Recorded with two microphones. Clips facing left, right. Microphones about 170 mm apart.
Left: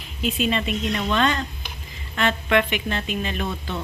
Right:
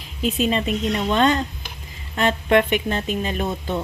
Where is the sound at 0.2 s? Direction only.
40° right (ahead or behind).